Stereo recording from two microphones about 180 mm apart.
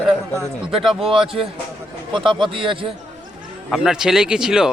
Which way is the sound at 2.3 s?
30° right (ahead or behind).